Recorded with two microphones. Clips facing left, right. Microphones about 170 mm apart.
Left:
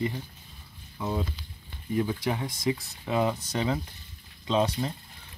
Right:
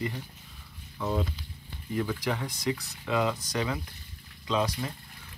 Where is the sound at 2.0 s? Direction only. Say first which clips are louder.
Left 2 dB; 20° left (ahead or behind).